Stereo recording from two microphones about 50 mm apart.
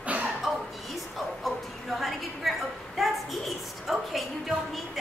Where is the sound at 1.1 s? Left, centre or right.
Centre.